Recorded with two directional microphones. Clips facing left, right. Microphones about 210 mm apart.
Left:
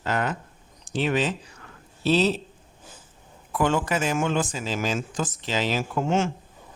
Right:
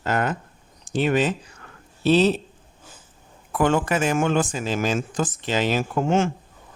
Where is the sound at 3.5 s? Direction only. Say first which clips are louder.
Right 3 dB; 55° right (ahead or behind).